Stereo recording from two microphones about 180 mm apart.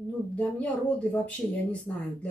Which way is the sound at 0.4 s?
10° left (ahead or behind).